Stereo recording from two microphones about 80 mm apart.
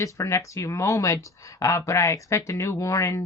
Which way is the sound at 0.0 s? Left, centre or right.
Left.